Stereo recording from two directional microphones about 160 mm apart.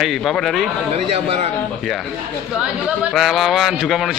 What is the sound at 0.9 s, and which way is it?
Speech, 40° right (ahead or behind).